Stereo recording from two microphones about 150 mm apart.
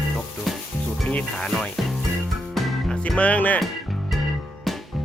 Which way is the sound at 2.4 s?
Centre (ahead or behind).